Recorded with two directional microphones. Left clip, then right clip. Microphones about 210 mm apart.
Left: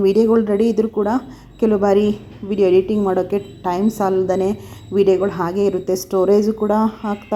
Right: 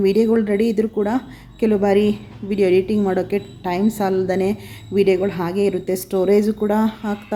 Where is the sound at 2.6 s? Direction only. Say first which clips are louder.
Left 2 dB; 15° right (ahead or behind).